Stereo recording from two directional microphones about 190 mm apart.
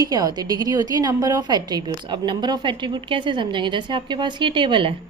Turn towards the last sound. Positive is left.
turn(degrees=-25)  # may be behind; listen again after turning